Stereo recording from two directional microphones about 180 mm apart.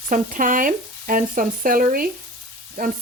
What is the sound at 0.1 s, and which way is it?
Speech, 50° right (ahead or behind).